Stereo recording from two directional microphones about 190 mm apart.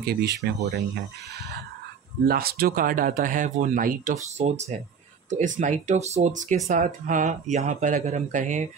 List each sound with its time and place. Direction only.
0.0 s speech: 60° right (ahead or behind)
2.2 s speech: 55° right (ahead or behind)